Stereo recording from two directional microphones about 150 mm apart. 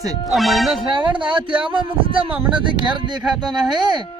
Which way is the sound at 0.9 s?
35° right (ahead or behind).